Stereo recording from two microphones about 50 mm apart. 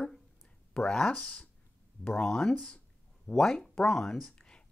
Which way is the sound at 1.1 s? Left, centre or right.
Left.